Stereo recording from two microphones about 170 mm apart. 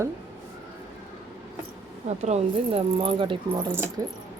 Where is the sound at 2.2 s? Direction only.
35° right (ahead or behind); by 4.1 s 20° right (ahead or behind).